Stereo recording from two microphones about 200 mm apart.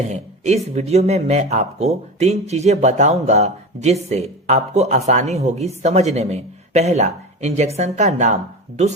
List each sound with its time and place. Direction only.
0.0 s speech: 35° right (ahead or behind)